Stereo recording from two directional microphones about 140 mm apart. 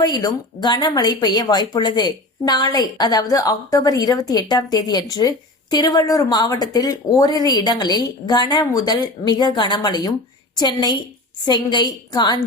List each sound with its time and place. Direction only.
0.0 s a woman's voice: 30° left (ahead or behind)